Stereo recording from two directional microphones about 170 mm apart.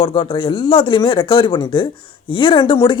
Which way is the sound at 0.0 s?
30° left (ahead or behind).